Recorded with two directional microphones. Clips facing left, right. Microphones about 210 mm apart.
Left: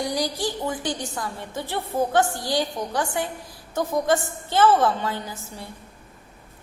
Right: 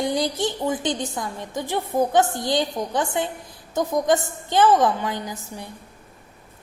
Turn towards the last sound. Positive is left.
turn(degrees=-15)  # may be behind; listen again after turning